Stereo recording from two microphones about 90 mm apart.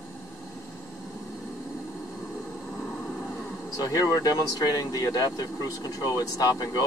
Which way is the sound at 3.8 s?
45° left (ahead or behind).